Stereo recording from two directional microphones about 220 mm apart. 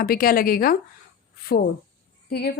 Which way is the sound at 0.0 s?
40° left (ahead or behind).